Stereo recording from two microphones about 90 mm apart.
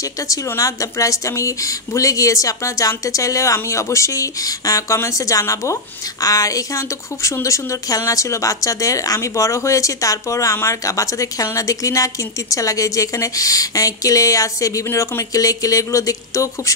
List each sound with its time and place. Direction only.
0.0 s a woman's voice: 40° left (ahead or behind)